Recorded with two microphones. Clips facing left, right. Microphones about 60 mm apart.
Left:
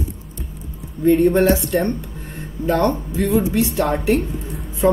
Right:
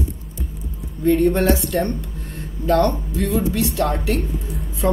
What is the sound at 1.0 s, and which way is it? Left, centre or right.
Speech, centre.